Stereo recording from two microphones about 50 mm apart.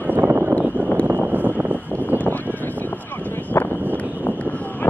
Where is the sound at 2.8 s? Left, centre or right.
Left.